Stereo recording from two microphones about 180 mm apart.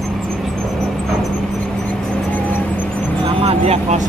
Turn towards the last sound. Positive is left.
turn(degrees=-35)  # may be behind; listen again after turning